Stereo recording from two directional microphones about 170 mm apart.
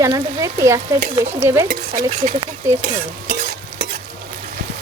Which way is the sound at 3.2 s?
55° right (ahead or behind).